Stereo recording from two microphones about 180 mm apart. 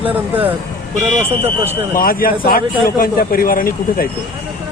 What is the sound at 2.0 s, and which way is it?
A man's voice, 55° left (ahead or behind).